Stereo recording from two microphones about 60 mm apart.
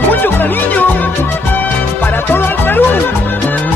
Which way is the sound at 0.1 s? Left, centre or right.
Left.